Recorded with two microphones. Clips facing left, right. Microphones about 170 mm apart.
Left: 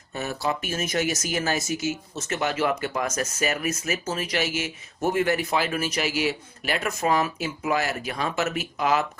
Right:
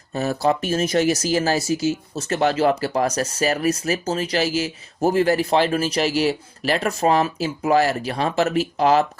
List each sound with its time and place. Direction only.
0.1 s speech: 35° right (ahead or behind)